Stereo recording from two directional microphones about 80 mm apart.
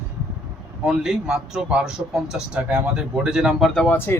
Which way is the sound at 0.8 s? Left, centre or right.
Centre.